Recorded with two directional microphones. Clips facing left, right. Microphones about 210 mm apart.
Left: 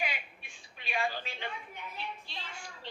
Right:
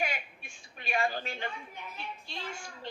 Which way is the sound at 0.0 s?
45° right (ahead or behind).